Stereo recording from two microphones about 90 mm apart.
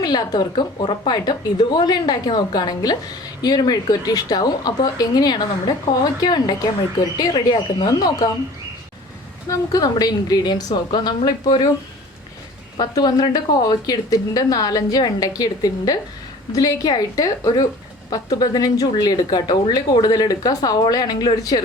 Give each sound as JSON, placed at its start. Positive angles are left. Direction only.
{"t": 0.0, "sound": "a woman's voice", "side_deg": 50}
{"t": 9.5, "sound": "a woman's voice", "side_deg": 45}
{"t": 12.8, "sound": "a woman's voice", "side_deg": 50}